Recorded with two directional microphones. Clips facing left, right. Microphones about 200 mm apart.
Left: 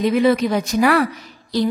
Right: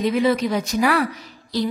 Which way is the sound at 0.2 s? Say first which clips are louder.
Left 3 dB; 55° left (ahead or behind).